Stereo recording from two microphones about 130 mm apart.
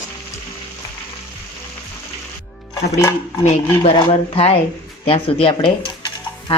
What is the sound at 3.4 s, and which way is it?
Speech, 60° left (ahead or behind).